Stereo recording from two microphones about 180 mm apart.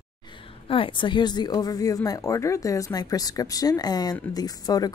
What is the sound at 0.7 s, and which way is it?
Speech, 30° left (ahead or behind).